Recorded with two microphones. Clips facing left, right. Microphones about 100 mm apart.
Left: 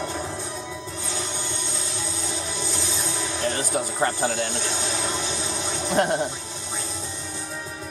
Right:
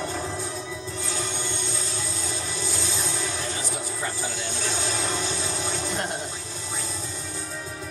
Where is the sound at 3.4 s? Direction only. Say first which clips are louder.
Left 6 dB; 60° left (ahead or behind).